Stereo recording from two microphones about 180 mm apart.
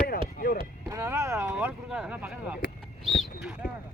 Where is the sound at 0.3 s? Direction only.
55° left (ahead or behind).